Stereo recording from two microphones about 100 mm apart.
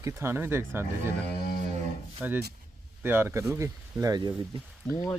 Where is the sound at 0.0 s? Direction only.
25° right (ahead or behind).